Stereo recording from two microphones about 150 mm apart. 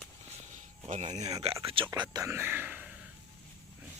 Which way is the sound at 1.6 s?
35° right (ahead or behind).